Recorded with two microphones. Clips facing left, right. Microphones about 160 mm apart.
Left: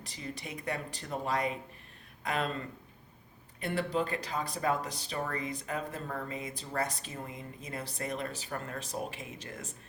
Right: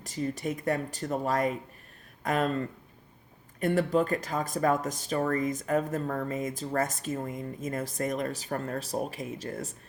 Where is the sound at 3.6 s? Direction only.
45° right (ahead or behind).